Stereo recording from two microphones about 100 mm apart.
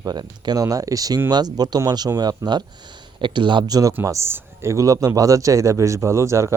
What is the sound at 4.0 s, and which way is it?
Speech, 25° right (ahead or behind).